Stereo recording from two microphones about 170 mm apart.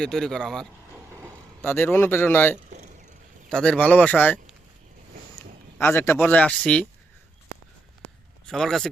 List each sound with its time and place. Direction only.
0.0 s speech: 5° left (ahead or behind)
0.9 s vehicle: 15° right (ahead or behind)
1.6 s speech: 15° left (ahead or behind)
5.7 s speech: 10° left (ahead or behind)
8.4 s speech: centre (ahead or behind)